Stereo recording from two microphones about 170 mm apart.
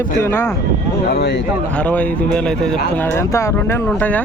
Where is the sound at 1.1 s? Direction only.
80° left.